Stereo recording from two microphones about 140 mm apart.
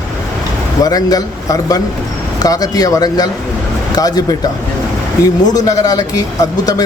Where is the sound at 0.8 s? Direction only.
25° left (ahead or behind).